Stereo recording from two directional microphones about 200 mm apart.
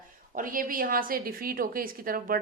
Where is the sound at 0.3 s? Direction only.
45° right (ahead or behind).